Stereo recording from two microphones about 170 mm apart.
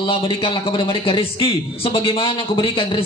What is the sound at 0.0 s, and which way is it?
A man's voice, 30° left (ahead or behind).